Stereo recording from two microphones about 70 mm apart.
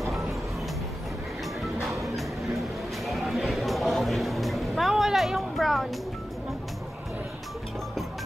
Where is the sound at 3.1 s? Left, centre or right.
Centre.